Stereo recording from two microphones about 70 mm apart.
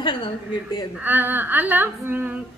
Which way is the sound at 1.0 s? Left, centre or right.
Right.